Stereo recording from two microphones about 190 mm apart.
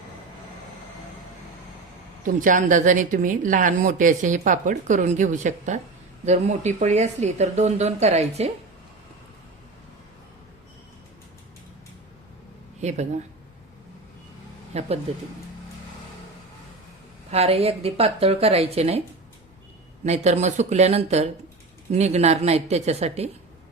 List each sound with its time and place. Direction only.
2.2 s speech: 45° right (ahead or behind)
12.8 s speech: 35° right (ahead or behind)
14.7 s speech: 35° right (ahead or behind)
17.3 s speech: 30° right (ahead or behind)
20.1 s speech: 35° right (ahead or behind)